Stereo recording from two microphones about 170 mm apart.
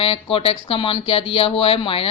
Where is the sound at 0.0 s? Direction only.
35° left (ahead or behind).